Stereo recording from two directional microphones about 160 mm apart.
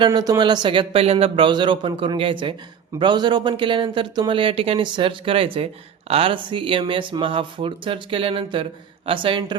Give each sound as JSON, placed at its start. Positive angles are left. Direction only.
{"t": 0.0, "sound": "speech", "side_deg": -25}